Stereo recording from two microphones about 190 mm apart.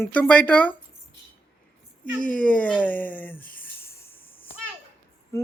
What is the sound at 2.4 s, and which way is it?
Music, 10° left (ahead or behind).